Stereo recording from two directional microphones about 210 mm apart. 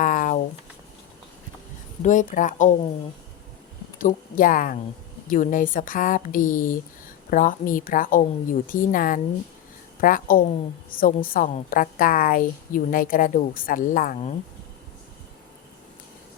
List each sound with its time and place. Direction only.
0.0 s a sound: 40° left (ahead or behind)
2.0 s a woman's voice: 35° left (ahead or behind)
3.9 s a woman's voice: 40° left (ahead or behind)